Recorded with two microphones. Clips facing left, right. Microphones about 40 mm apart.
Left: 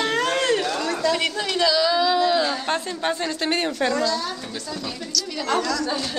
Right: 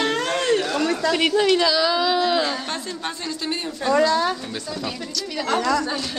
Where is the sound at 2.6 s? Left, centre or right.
Left.